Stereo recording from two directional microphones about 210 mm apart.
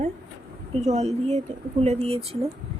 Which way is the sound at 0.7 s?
30° right (ahead or behind).